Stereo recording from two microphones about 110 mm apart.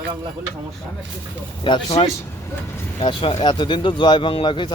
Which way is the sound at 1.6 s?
45° left (ahead or behind).